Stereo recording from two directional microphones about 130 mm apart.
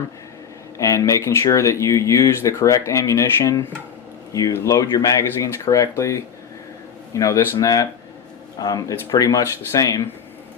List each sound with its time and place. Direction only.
0.8 s speech: 25° left (ahead or behind)